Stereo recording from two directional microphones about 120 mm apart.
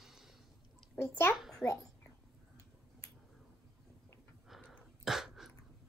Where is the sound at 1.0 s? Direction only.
20° left (ahead or behind).